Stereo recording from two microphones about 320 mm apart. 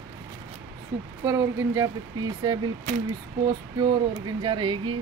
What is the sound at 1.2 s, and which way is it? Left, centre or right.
Speech, centre.